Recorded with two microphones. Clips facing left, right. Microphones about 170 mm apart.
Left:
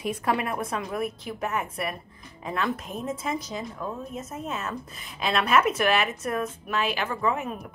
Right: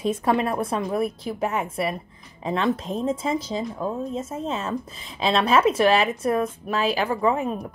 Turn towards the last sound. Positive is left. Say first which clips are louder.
# right 5 dB
turn(degrees=-30)  # may be behind; listen again after turning